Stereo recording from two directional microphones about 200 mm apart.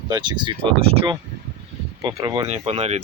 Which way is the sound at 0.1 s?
20° right (ahead or behind).